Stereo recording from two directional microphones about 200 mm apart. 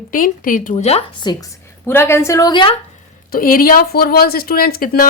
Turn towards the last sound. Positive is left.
turn(degrees=45)  # may be behind; listen again after turning